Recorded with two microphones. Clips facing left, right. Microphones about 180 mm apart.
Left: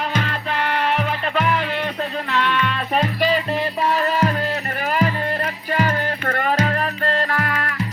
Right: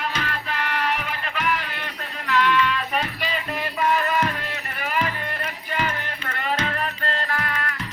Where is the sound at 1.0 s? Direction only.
35° left (ahead or behind).